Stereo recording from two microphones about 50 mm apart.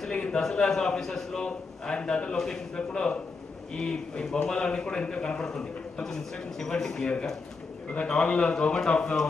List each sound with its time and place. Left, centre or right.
0.1 s a sound: left
0.4 s a man's voice: centre
2.3 s a man's voice: centre